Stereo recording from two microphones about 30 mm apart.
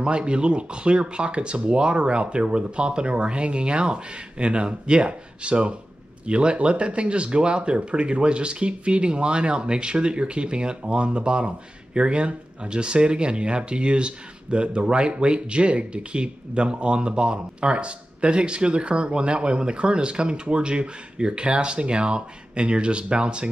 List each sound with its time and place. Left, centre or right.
0.0 s speech: right